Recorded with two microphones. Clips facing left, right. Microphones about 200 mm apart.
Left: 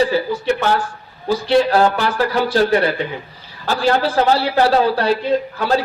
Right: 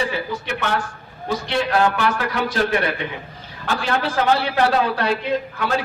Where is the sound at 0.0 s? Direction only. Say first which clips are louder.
Left 8 dB; 35° left (ahead or behind).